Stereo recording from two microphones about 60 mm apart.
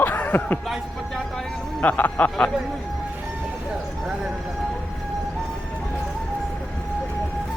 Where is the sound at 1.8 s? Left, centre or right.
Left.